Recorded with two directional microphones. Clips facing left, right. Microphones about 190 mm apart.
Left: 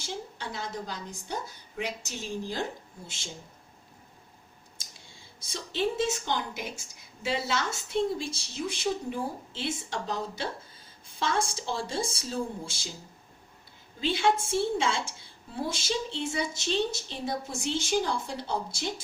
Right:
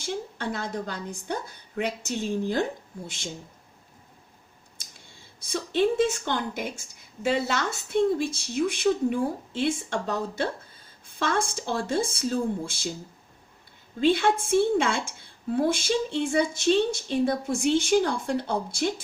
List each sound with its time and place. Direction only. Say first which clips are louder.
0.0 s speech: right 6 dB; 55° right (ahead or behind)
5.5 s a woman's voice: right 6 dB; 55° right (ahead or behind)
14.0 s speech: right 5 dB; 55° right (ahead or behind)